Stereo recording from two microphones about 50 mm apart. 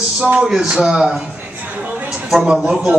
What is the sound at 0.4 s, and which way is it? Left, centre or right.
Speech, centre.